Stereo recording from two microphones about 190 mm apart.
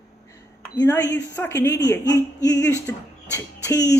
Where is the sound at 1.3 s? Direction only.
10° left (ahead or behind).